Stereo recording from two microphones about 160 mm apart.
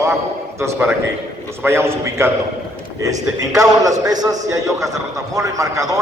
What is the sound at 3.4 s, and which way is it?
A man's voice, 20° right (ahead or behind).